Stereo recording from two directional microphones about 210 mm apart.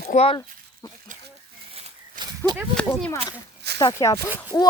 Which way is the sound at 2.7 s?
10° left (ahead or behind).